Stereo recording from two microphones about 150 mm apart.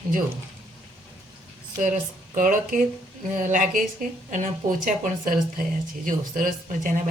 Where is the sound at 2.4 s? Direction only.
60° right (ahead or behind).